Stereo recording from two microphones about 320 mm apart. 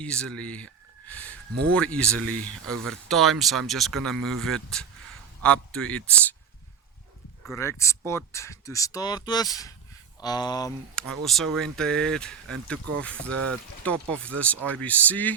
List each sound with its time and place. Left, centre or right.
0.0 s a man's voice: centre
7.4 s speech: centre
13.3 s speech: right
13.8 s speech: centre